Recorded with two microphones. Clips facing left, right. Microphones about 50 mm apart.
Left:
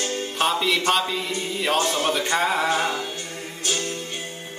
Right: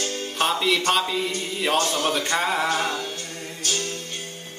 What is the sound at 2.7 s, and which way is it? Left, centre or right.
Music, centre.